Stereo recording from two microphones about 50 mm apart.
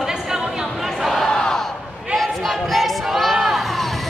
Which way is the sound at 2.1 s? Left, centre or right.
Centre.